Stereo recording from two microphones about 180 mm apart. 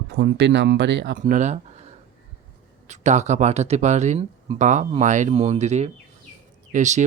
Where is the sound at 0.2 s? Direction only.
70° right (ahead or behind).